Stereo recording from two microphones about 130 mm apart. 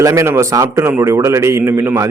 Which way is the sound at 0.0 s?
25° right (ahead or behind).